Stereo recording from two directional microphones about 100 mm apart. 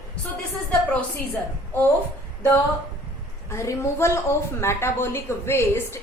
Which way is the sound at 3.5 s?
30° left (ahead or behind).